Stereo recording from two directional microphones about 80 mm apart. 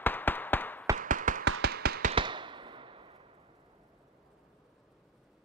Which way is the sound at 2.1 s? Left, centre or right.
Right.